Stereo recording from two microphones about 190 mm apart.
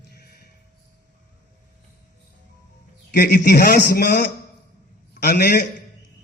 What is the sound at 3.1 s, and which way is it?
A man's voice, 55° left (ahead or behind).